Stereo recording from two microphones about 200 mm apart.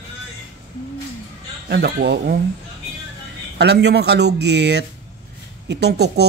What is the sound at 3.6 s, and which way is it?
Speech, 55° right (ahead or behind).